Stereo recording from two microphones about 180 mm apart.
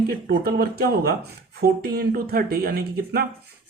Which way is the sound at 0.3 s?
60° right (ahead or behind).